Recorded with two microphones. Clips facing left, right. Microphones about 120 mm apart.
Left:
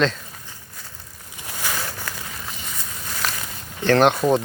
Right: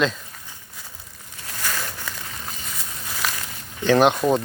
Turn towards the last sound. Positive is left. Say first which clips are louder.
# left 1 dB
turn(degrees=0)  # may be behind; listen again after turning